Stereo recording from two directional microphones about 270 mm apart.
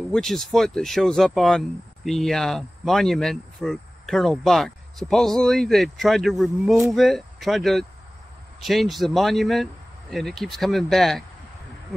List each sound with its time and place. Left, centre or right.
0.1 s speech: centre